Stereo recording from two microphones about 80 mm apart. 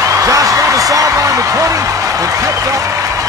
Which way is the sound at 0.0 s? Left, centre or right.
Right.